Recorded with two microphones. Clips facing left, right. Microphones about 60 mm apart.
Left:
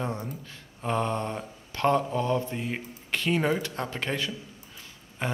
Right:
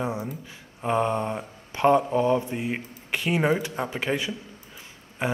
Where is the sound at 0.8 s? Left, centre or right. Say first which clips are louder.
Right 4 dB; centre.